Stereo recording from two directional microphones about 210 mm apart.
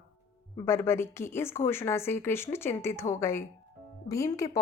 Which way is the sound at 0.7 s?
10° left (ahead or behind).